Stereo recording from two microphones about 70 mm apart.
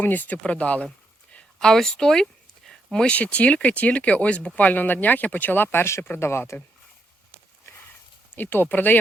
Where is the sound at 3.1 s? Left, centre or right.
Centre; by 6.6 s left.